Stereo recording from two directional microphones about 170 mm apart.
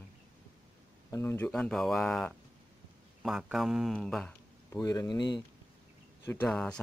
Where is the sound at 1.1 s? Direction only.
15° left (ahead or behind).